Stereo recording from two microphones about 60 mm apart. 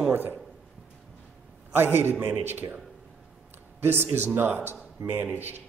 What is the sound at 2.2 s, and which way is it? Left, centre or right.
Speech, right.